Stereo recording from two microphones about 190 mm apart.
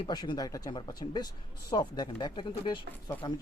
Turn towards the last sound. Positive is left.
turn(degrees=25)  # may be behind; listen again after turning